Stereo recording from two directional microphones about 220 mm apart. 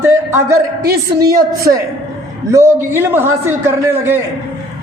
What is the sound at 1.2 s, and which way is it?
Speech, 15° right (ahead or behind).